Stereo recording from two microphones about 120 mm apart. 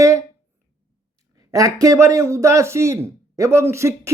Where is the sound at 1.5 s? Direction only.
30° right (ahead or behind).